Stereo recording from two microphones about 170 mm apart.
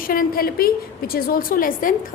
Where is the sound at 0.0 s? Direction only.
55° left (ahead or behind).